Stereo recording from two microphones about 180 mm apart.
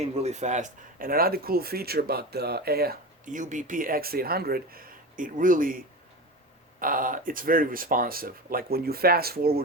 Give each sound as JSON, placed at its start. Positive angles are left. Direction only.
{"t": 0.0, "sound": "speech", "side_deg": -35}